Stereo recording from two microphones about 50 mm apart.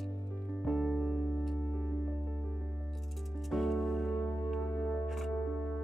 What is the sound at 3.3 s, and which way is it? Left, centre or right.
Music, centre.